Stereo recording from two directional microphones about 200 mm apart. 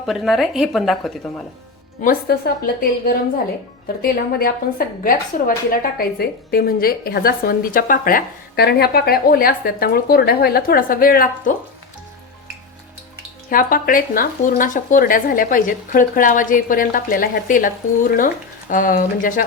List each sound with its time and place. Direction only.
0.0 s a woman's voice: centre (ahead or behind)
2.0 s a woman's voice: 50° left (ahead or behind)
4.0 s a woman's voice: 50° left (ahead or behind)
13.5 s a woman's voice: 45° left (ahead or behind)